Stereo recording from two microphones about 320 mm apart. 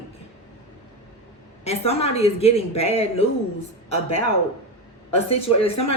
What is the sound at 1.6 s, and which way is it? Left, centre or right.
Speech, centre.